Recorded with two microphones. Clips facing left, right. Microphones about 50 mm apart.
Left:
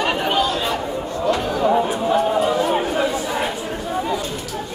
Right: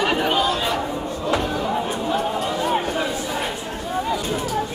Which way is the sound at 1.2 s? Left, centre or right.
Centre.